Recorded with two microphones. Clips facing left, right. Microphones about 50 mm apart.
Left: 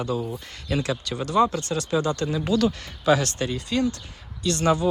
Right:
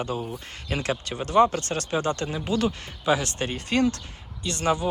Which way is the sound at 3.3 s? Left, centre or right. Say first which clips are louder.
Even; right.